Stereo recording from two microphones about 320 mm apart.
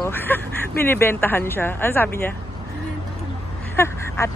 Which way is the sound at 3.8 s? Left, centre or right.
Centre.